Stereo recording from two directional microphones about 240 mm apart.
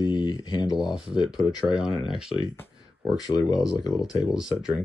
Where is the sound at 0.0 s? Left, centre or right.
Centre.